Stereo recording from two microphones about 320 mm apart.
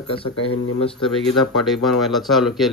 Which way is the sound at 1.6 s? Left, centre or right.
Centre.